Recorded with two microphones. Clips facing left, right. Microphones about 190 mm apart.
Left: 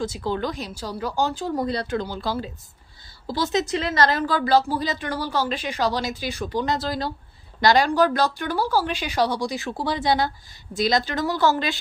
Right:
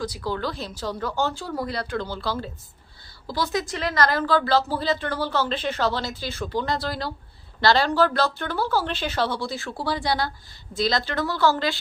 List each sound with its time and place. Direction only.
0.0 s a woman's voice: 20° left (ahead or behind)